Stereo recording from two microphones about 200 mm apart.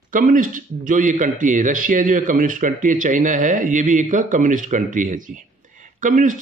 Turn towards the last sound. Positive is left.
turn(degrees=-40)  # may be behind; listen again after turning